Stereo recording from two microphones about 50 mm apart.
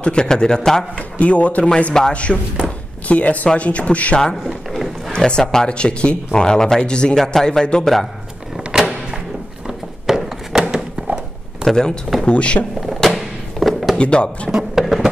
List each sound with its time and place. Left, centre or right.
0.0 s speech: centre
1.1 s speech: left
2.0 s speech: centre
2.6 s speech: left
4.5 s a sound: centre
5.1 s speech: centre
7.2 s speech: centre
7.8 s a man's voice: centre
8.7 s a sound: centre
11.7 s speech: centre
12.3 s speech: left
12.8 s a sound: centre
13.9 s speech: left
14.5 s a sound: centre